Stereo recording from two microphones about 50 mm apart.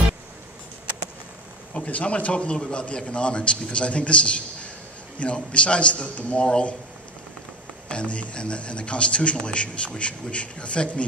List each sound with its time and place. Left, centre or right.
1.7 s a man's voice: left
7.9 s a man's voice: left